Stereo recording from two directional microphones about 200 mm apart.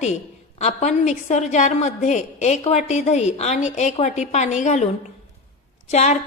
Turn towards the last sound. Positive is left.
turn(degrees=35)  # may be behind; listen again after turning